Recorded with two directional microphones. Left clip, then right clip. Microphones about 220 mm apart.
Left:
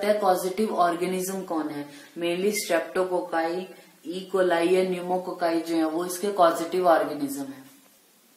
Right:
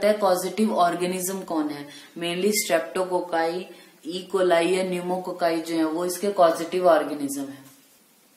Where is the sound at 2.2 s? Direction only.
40° right (ahead or behind).